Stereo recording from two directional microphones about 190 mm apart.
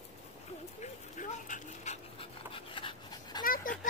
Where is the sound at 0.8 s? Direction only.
40° left (ahead or behind); by 3.5 s 20° left (ahead or behind).